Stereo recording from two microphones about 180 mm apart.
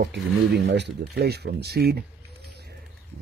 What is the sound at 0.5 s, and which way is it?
Speech, 65° right (ahead or behind).